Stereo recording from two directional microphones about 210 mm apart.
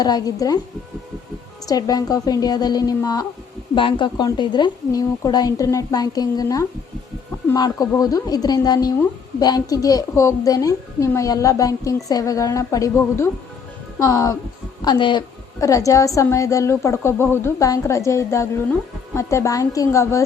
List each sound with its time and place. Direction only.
0.0 s a woman's voice: 15° left (ahead or behind)
1.6 s a woman's voice: 20° left (ahead or behind)